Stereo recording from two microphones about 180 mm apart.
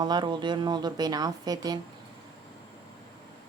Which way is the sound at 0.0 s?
25° right (ahead or behind).